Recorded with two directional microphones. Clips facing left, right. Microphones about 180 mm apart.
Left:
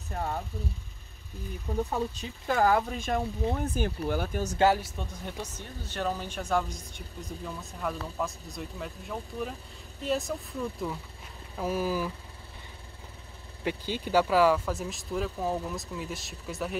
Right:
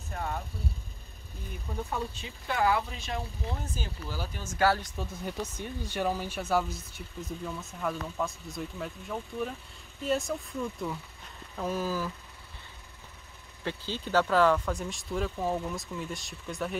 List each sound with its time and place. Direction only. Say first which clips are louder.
0.1 s speech: left 2 dB; 35° left (ahead or behind)
1.9 s speech: left 3 dB; 40° left (ahead or behind); by 4.4 s 55° left (ahead or behind)
4.7 s speech: even; centre (ahead or behind)
5.6 s speech: right 2 dB; 10° right (ahead or behind); by 12.1 s 10° left (ahead or behind)
13.7 s speech: left 3 dB; 10° left (ahead or behind)